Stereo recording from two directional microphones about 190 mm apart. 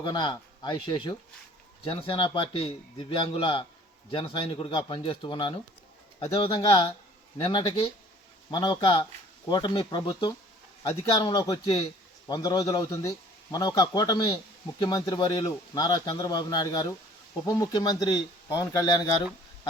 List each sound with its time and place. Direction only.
0.0 s speech: 25° left (ahead or behind)